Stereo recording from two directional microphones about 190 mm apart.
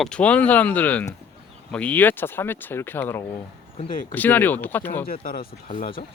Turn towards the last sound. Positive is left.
turn(degrees=35)  # may be behind; listen again after turning